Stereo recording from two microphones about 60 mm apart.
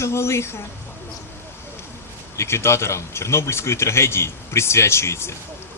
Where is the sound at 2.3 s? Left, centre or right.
Left.